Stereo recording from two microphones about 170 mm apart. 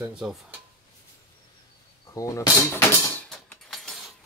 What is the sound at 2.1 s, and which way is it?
Speech, 20° left (ahead or behind).